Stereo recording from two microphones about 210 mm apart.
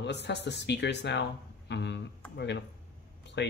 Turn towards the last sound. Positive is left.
turn(degrees=55)  # may be behind; listen again after turning